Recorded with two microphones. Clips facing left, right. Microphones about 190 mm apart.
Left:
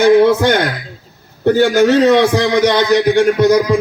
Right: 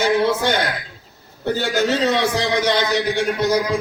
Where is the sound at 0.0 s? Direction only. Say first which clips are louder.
Left 9 dB; 55° left (ahead or behind).